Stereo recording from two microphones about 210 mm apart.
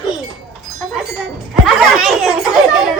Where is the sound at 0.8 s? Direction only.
Centre (ahead or behind).